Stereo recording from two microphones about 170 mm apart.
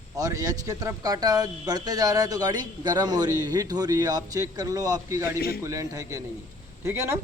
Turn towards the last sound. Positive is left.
turn(degrees=-15)  # may be behind; listen again after turning